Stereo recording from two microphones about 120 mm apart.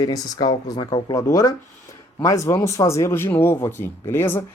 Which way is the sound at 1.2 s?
30° left (ahead or behind).